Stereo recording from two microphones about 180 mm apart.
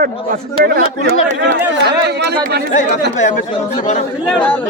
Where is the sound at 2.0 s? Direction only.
65° right (ahead or behind).